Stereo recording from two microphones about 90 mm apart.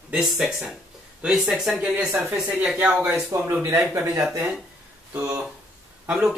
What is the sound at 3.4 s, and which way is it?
Speech, 30° right (ahead or behind).